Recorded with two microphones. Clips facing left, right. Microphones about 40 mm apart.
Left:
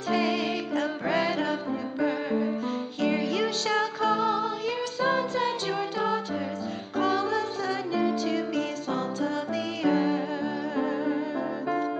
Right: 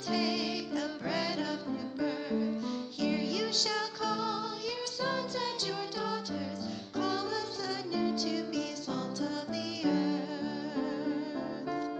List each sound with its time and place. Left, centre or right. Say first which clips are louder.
0.1 s music: left 6 dB; centre
3.0 s music: left 6 dB; left
7.0 s music: left 8 dB; centre
9.8 s humming: left 6 dB; centre